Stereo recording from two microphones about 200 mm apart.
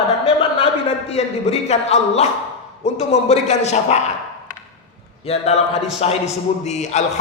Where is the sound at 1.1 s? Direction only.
30° left (ahead or behind).